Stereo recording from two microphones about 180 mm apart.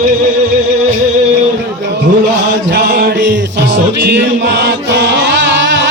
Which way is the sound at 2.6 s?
65° right (ahead or behind).